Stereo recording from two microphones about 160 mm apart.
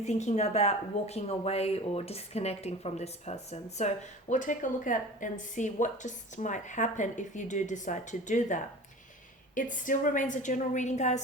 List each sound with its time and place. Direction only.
0.0 s speech: 45° left (ahead or behind)